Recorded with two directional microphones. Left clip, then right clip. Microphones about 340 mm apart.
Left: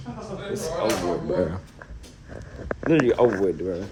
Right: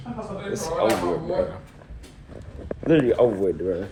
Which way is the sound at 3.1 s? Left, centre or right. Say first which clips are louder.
Even; centre.